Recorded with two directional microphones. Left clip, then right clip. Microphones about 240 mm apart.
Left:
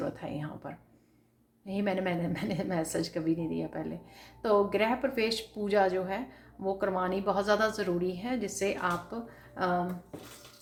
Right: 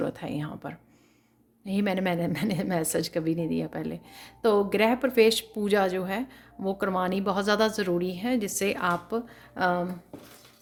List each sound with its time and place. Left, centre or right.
0.0 s a woman's voice: right